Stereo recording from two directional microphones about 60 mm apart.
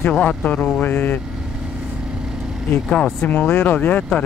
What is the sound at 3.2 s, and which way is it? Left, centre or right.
Speech, left.